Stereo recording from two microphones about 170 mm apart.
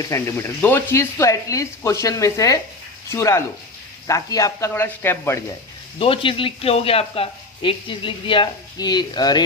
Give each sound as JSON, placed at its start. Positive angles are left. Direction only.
{"t": 0.0, "sound": "speech", "side_deg": 15}
{"t": 6.0, "sound": "speech", "side_deg": 30}